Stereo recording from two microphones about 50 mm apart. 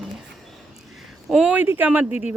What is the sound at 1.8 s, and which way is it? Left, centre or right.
Speech, right.